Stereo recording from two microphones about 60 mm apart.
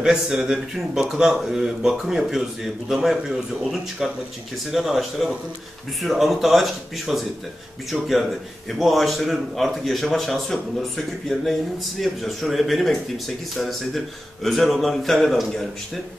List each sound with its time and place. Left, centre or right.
0.0 s a man's voice: centre